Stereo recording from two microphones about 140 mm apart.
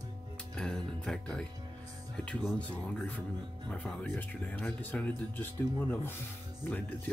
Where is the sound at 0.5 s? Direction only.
5° left (ahead or behind).